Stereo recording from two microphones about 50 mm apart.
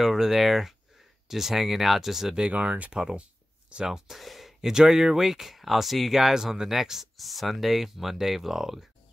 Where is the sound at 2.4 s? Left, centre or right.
Right.